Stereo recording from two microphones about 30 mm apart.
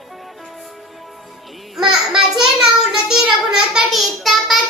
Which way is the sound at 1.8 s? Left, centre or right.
Centre.